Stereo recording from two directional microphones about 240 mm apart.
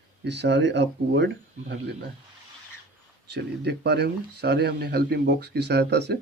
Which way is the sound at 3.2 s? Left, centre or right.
Right.